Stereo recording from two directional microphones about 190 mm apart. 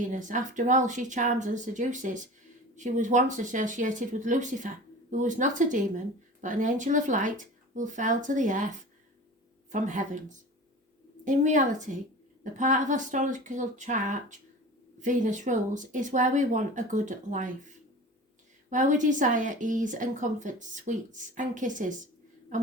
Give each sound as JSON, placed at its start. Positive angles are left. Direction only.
{"t": 0.0, "sound": "a woman's voice", "side_deg": -40}
{"t": 9.7, "sound": "a woman's voice", "side_deg": -40}
{"t": 18.7, "sound": "a woman's voice", "side_deg": -40}